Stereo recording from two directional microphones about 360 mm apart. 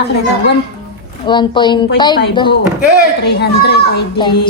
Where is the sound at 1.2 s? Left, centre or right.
Centre.